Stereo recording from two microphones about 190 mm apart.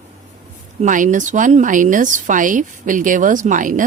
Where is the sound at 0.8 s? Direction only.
40° right (ahead or behind).